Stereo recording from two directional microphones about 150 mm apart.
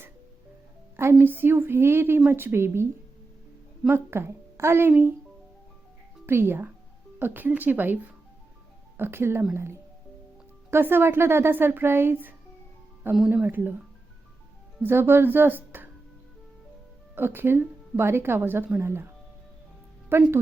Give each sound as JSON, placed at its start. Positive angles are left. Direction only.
{"t": 1.1, "sound": "a woman's voice", "side_deg": -15}
{"t": 3.8, "sound": "a woman's voice", "side_deg": -15}
{"t": 6.2, "sound": "a woman's voice", "side_deg": -15}
{"t": 9.0, "sound": "a woman's voice", "side_deg": -15}
{"t": 17.2, "sound": "a woman's voice", "side_deg": -15}